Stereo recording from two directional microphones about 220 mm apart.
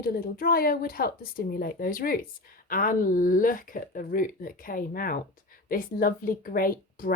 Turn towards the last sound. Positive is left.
turn(degrees=40)  # may be behind; listen again after turning